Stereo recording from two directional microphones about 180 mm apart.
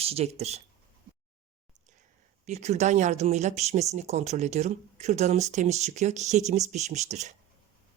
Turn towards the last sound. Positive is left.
turn(degrees=-40)  # may be behind; listen again after turning